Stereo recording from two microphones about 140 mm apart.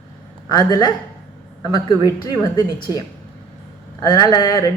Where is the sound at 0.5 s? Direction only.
30° left (ahead or behind).